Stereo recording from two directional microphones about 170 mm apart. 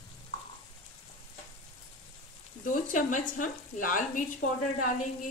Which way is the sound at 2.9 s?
50° left (ahead or behind).